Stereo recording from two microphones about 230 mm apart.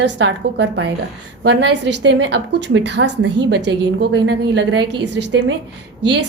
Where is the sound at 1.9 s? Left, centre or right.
Right.